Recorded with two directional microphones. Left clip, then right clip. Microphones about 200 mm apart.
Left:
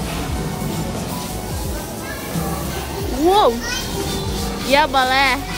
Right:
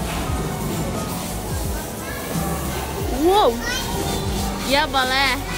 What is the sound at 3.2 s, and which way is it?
Children playing, 20° right (ahead or behind).